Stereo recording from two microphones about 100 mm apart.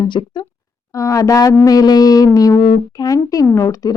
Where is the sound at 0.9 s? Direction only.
35° left (ahead or behind).